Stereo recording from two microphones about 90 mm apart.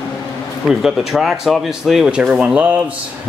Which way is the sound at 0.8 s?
Centre (ahead or behind).